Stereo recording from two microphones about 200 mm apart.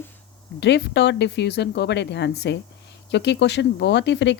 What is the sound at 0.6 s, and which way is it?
Speech, 60° left (ahead or behind).